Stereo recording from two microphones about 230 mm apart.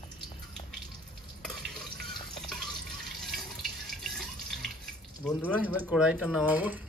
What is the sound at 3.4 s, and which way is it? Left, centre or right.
Water tap, centre.